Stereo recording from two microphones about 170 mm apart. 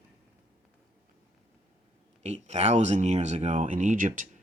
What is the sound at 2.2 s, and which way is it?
Speech, 40° right (ahead or behind).